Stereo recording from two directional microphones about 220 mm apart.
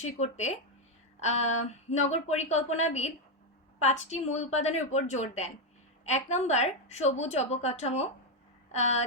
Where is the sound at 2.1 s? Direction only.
30° left (ahead or behind).